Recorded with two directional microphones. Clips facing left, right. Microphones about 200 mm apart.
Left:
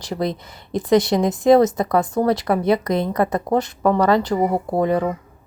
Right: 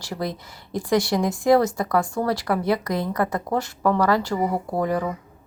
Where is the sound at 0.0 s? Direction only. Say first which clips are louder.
Left 5 dB; 20° left (ahead or behind).